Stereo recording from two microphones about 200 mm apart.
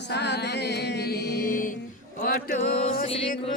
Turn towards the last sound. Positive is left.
turn(degrees=45)  # may be behind; listen again after turning